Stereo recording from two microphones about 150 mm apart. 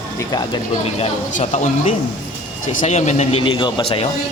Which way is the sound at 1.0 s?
50° left (ahead or behind).